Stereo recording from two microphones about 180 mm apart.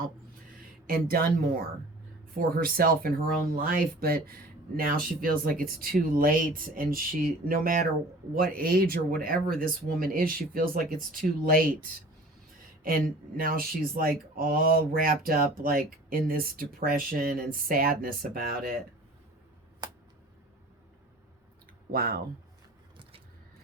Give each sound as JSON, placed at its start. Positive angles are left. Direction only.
{"t": 0.9, "sound": "speech", "side_deg": -55}
{"t": 21.9, "sound": "speech", "side_deg": -55}